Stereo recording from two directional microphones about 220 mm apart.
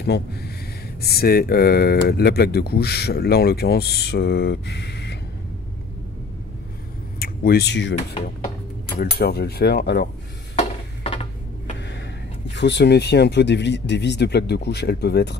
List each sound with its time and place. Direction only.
0.0 s speech: 45° left (ahead or behind)
7.2 s speech: 45° left (ahead or behind)
8.9 s speech: 45° left (ahead or behind)
12.5 s speech: 50° left (ahead or behind)